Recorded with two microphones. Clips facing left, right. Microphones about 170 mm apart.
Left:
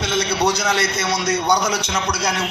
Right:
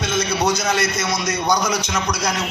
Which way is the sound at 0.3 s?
30° left (ahead or behind).